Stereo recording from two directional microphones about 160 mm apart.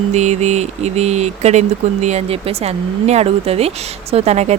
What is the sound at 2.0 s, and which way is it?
Speech, 40° right (ahead or behind).